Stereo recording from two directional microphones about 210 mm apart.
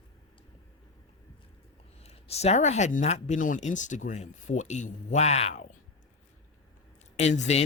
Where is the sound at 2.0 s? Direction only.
30° left (ahead or behind).